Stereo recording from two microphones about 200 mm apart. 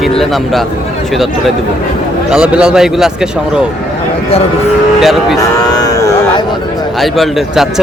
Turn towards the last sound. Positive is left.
turn(degrees=0)  # may be behind; listen again after turning